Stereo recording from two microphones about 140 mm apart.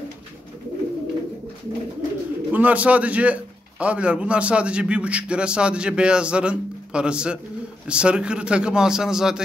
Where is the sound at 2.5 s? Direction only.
10° right (ahead or behind).